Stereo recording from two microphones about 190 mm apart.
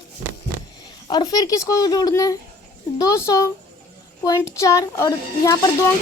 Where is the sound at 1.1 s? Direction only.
20° left (ahead or behind).